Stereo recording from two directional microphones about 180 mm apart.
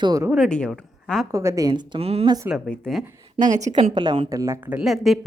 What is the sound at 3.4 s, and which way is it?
Speech, 40° right (ahead or behind).